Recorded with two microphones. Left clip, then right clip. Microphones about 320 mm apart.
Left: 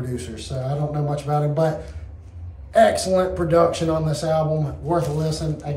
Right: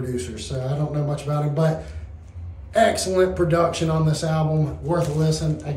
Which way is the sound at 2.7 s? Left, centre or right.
Centre.